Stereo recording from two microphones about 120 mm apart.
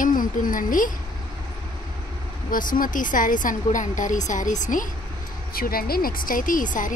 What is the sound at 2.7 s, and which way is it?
A woman's voice, 90° left.